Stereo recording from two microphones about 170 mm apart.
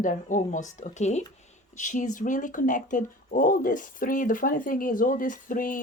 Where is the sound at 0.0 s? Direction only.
50° left (ahead or behind).